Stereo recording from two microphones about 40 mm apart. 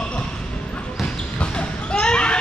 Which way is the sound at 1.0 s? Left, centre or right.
Left.